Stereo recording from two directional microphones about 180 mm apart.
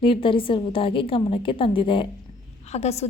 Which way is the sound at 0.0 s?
30° left (ahead or behind).